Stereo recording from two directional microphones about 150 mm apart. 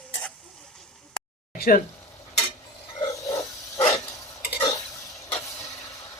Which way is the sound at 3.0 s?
20° left (ahead or behind).